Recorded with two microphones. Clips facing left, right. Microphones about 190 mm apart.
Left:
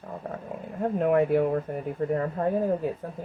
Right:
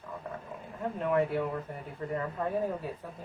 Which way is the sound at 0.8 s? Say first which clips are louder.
Left 6 dB; 55° left (ahead or behind).